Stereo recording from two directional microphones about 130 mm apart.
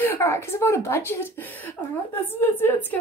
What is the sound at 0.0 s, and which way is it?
A woman's voice, 20° left (ahead or behind).